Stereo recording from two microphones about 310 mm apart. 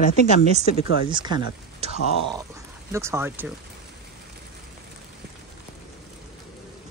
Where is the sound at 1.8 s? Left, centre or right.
Centre.